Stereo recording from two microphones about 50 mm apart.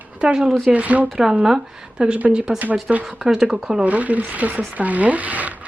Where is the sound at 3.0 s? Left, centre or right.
Centre.